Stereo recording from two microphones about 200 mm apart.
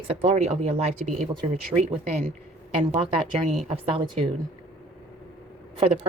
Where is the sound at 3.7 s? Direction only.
30° right (ahead or behind).